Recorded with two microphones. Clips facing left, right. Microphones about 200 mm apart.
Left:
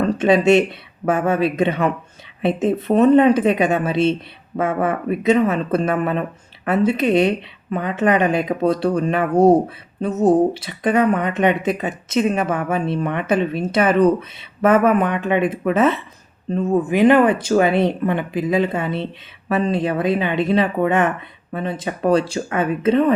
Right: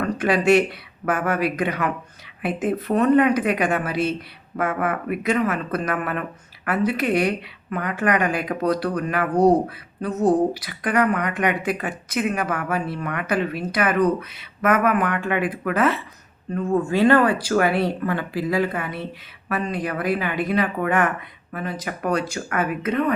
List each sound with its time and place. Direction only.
0.0 s speech: 25° left (ahead or behind)